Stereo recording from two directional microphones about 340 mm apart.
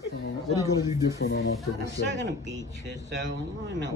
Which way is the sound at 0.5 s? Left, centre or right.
Centre.